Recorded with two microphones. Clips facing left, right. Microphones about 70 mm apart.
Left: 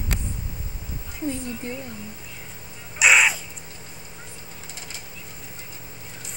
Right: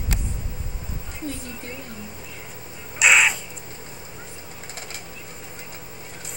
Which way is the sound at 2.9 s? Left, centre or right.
Centre.